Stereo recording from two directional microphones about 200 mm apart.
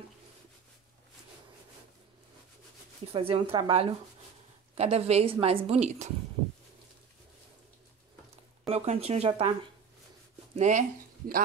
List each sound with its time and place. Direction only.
3.1 s a woman's voice: 30° right (ahead or behind)
8.6 s a woman's voice: 30° right (ahead or behind)
10.5 s speech: 35° right (ahead or behind)